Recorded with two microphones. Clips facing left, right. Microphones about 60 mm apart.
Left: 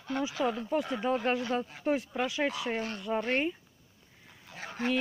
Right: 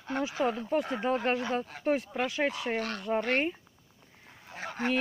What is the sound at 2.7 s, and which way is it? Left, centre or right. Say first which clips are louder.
Speech: right 2 dB; right.